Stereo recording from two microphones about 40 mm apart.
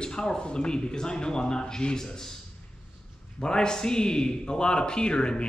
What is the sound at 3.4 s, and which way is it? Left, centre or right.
Speech, centre.